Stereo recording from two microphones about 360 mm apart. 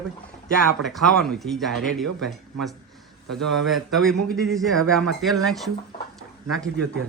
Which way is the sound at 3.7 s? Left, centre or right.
Centre.